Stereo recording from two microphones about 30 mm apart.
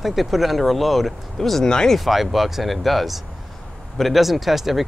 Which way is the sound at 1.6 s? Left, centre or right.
Left.